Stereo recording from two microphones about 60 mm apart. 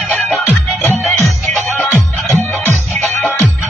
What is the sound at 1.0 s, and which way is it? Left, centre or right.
Music, centre.